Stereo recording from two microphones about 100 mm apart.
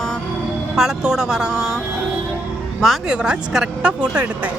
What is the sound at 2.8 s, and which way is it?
Speech, 5° right (ahead or behind).